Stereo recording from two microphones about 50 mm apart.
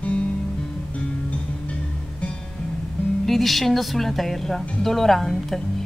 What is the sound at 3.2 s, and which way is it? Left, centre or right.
Speech, centre.